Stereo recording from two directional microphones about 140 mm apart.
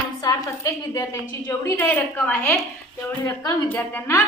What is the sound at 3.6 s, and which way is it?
Speech, 15° left (ahead or behind).